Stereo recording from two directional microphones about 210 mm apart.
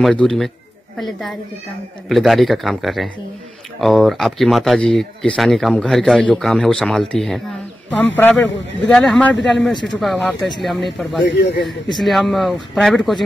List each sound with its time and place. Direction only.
0.0 s speech: 5° left (ahead or behind)
11.2 s a man's voice: 55° left (ahead or behind)
12.0 s speech: centre (ahead or behind)